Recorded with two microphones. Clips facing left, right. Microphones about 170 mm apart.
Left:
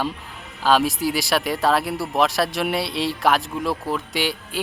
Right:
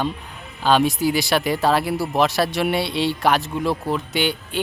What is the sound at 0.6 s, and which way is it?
Speech, centre (ahead or behind).